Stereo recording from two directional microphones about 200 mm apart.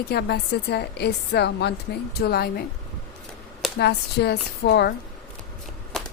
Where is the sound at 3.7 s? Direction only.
55° left (ahead or behind).